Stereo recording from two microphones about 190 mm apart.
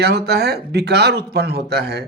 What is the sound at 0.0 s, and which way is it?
Speech, 60° right (ahead or behind).